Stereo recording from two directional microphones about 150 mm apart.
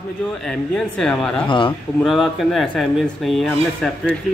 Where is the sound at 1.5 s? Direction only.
35° left (ahead or behind).